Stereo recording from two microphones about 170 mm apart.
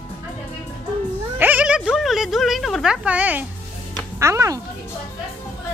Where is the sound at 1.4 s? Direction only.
10° right (ahead or behind).